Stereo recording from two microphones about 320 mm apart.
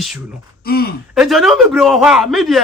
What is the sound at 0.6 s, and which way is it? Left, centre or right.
Speech, left.